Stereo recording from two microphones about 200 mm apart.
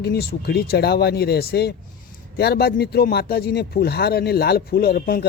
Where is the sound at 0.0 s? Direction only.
55° left (ahead or behind).